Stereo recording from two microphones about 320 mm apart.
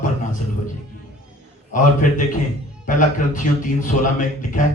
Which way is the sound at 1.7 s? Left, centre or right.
Left.